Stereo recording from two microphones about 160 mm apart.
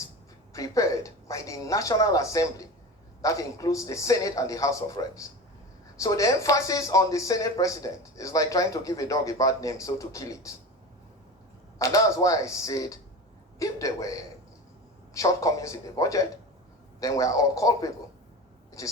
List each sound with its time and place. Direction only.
0.5 s speech: 20° left (ahead or behind)
11.8 s speech: 20° left (ahead or behind)